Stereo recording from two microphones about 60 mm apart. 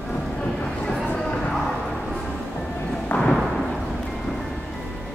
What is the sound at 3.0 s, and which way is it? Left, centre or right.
Thump, centre.